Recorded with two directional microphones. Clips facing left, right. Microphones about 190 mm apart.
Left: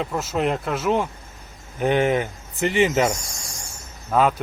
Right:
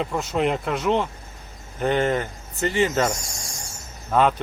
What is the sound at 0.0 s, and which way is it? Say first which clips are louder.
Speech: even; centre (ahead or behind).